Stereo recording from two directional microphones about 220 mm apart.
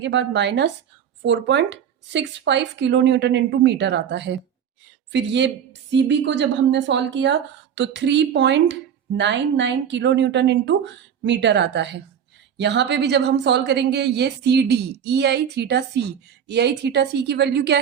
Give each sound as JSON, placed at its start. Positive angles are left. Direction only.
{"t": 0.0, "sound": "a woman's voice", "side_deg": -55}